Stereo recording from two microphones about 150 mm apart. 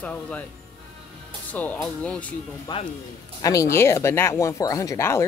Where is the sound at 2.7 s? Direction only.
30° left (ahead or behind).